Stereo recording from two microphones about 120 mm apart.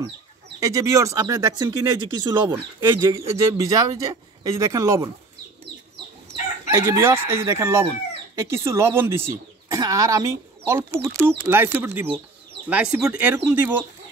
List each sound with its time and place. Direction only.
0.6 s speech: 25° right (ahead or behind)
2.5 s speech: 20° right (ahead or behind)
6.7 s speech: 20° right (ahead or behind)